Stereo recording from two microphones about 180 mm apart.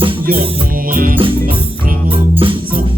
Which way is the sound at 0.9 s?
50° right (ahead or behind).